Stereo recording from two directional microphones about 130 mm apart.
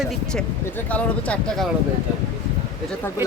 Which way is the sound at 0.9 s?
10° left (ahead or behind).